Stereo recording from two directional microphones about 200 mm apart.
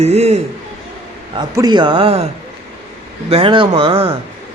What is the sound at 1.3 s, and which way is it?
Speech, 20° right (ahead or behind).